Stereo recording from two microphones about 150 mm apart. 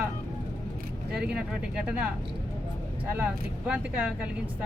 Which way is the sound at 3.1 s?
10° right (ahead or behind).